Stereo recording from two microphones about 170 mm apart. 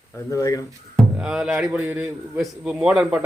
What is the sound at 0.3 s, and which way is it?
Speech, 20° left (ahead or behind).